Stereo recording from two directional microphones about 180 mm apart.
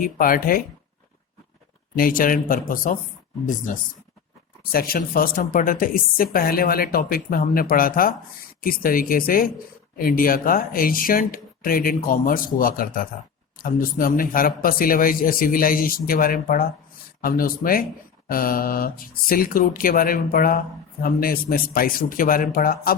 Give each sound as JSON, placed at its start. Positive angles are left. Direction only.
{"t": 0.0, "sound": "a woman's voice", "side_deg": 50}
{"t": 2.0, "sound": "a woman's voice", "side_deg": 50}
{"t": 4.7, "sound": "a woman's voice", "side_deg": 55}